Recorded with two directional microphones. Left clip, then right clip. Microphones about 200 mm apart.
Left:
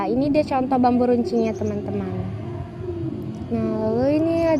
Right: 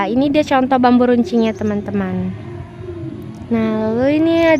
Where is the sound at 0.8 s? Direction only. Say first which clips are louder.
Right 6 dB; 45° right (ahead or behind).